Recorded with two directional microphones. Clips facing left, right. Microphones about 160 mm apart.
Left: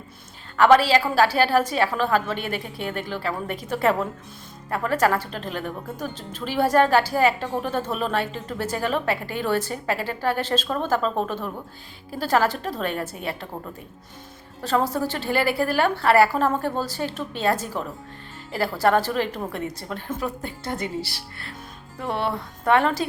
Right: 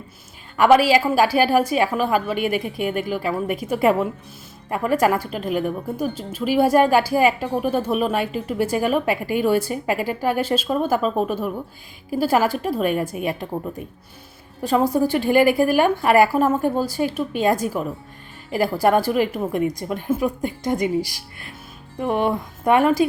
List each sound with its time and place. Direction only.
0.5 s a woman's voice: 10° right (ahead or behind)